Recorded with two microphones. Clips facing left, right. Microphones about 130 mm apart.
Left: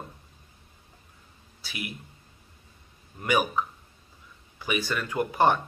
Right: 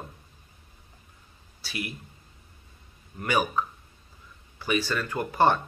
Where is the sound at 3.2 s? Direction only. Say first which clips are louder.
Left 1 dB; 15° left (ahead or behind).